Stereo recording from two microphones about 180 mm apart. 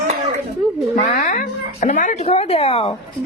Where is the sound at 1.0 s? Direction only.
45° left (ahead or behind).